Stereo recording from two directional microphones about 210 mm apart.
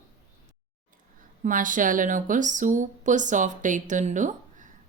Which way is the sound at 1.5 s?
40° right (ahead or behind).